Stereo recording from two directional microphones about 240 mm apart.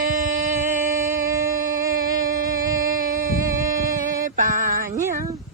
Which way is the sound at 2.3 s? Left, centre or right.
Right.